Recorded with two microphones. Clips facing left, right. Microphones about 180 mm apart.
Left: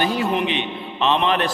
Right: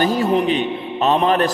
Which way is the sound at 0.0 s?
40° right (ahead or behind).